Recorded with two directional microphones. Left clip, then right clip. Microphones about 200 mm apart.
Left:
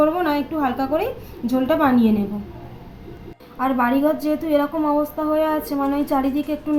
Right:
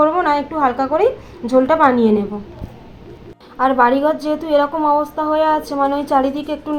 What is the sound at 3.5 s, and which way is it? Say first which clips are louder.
A woman's voice: right 7 dB; 15° right (ahead or behind).